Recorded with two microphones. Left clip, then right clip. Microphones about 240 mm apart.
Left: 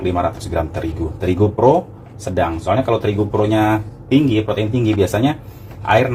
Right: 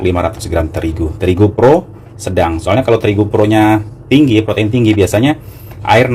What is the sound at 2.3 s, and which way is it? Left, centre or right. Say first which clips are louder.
Speech: right 5 dB; right.